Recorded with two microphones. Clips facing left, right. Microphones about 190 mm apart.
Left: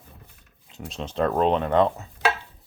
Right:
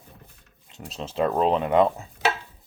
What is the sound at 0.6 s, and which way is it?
Speech, centre (ahead or behind).